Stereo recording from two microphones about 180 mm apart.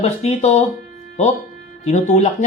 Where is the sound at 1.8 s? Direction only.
40° left (ahead or behind).